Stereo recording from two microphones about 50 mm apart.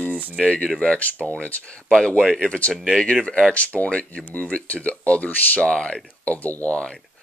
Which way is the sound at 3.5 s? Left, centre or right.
Left.